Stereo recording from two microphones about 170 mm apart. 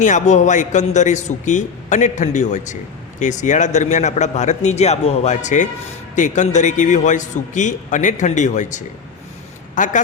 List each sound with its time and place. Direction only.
0.0 s a man's voice: 45° left (ahead or behind)